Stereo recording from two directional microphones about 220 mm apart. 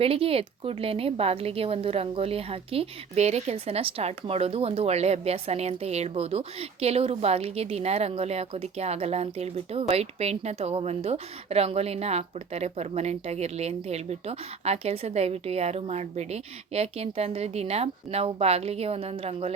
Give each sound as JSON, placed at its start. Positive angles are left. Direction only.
{"t": 0.0, "sound": "speech", "side_deg": -25}